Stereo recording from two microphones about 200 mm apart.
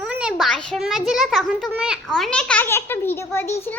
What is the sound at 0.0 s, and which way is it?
A child's voice, 5° right (ahead or behind).